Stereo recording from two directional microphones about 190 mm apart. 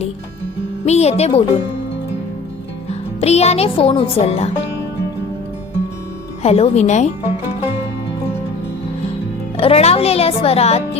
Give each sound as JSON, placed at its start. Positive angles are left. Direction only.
{"t": 0.9, "sound": "speech", "side_deg": 35}
{"t": 3.2, "sound": "speech", "side_deg": 35}
{"t": 6.4, "sound": "speech", "side_deg": 35}
{"t": 9.6, "sound": "speech", "side_deg": 30}